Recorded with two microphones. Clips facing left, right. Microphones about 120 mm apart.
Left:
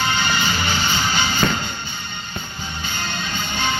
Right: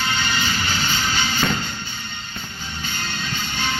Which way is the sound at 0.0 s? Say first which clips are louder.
Left 3 dB; 30° left (ahead or behind).